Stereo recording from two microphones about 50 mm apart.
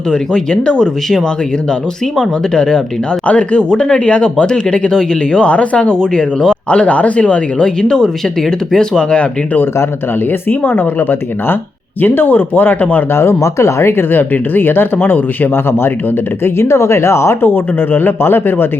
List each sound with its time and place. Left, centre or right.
0.1 s speech: centre
10.5 s speech: left
13.1 s speech: left
16.4 s speech: left
17.5 s speech: left